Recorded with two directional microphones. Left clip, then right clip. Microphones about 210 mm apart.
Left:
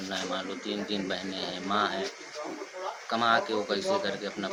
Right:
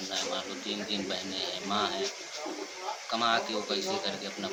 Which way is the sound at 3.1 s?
5° left (ahead or behind).